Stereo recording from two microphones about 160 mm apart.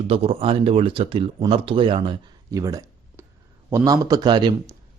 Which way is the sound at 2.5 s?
20° right (ahead or behind).